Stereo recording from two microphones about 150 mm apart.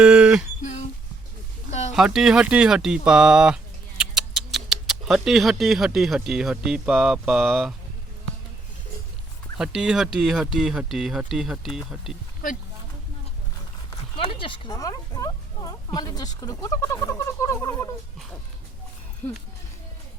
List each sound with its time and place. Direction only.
0.0 s a sound: 5° right (ahead or behind)
1.9 s speech: centre (ahead or behind)
9.6 s speech: 5° right (ahead or behind)
14.2 s speech: 35° left (ahead or behind)
14.7 s speech: 25° left (ahead or behind)